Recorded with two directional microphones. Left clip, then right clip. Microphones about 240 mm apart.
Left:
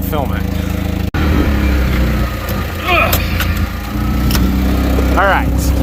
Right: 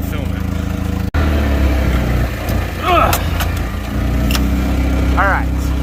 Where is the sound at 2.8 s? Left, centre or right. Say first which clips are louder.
Even; right.